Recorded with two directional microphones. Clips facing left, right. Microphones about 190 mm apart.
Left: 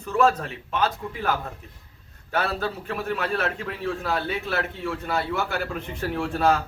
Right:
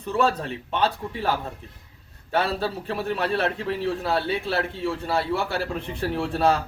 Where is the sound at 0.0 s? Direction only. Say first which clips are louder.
Left 2 dB; 35° right (ahead or behind).